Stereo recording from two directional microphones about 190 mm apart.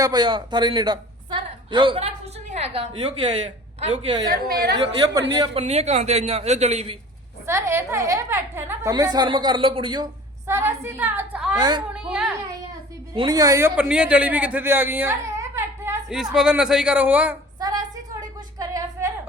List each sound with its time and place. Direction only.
0.0 s a woman's voice: 20° right (ahead or behind)
4.3 s a woman's voice: 50° right (ahead or behind)
5.5 s a woman's voice: 35° right (ahead or behind)
7.4 s a woman's voice: 15° right (ahead or behind)
11.5 s a woman's voice: 20° right (ahead or behind)
13.1 s a man's voice: 20° right (ahead or behind)
16.3 s speech: 5° right (ahead or behind)
17.6 s a sound: 20° right (ahead or behind)